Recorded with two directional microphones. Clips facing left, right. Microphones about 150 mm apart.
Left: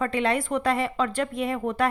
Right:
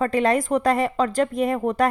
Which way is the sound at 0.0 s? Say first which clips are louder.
Right 5 dB; 40° right (ahead or behind).